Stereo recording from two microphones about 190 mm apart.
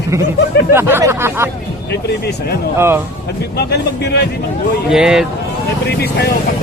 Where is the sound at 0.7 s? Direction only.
15° right (ahead or behind).